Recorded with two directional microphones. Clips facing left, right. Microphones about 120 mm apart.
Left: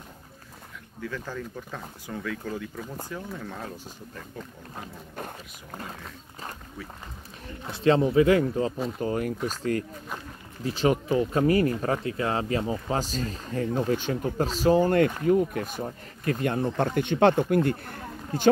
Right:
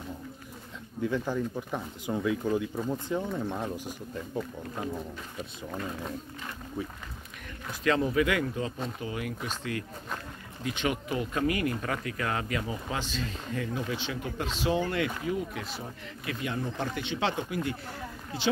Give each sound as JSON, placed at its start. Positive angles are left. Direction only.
{"t": 1.0, "sound": "speech", "side_deg": -20}
{"t": 7.6, "sound": "speech", "side_deg": 30}